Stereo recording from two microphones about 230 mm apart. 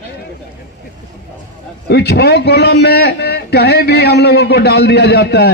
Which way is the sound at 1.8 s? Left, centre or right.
Left.